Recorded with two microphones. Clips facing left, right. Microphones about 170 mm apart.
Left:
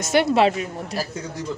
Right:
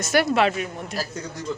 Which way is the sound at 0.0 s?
25° left (ahead or behind).